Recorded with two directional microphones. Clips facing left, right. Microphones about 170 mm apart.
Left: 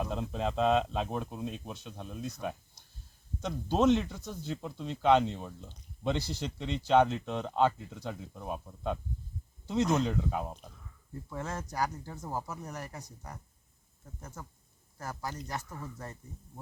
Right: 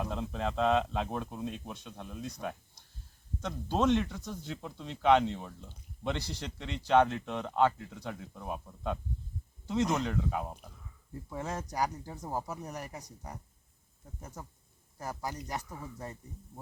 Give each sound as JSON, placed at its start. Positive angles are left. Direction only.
{"t": 0.0, "sound": "speech", "side_deg": 15}
{"t": 3.4, "sound": "speech", "side_deg": 10}
{"t": 10.4, "sound": "speech", "side_deg": -5}
{"t": 14.2, "sound": "speech", "side_deg": -15}